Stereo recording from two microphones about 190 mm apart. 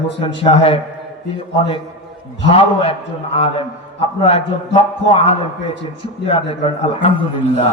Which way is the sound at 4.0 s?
30° left (ahead or behind).